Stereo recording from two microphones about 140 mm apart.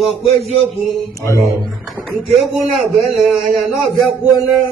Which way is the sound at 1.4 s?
Centre (ahead or behind).